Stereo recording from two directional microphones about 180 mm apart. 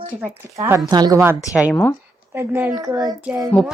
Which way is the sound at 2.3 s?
15° right (ahead or behind).